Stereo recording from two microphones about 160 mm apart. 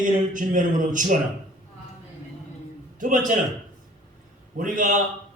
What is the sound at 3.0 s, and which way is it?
Speech, 55° right (ahead or behind).